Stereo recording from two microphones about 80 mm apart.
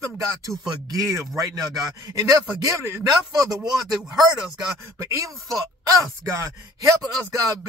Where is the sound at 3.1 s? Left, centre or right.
Right.